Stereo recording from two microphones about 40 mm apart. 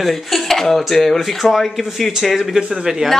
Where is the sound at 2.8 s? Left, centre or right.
Centre.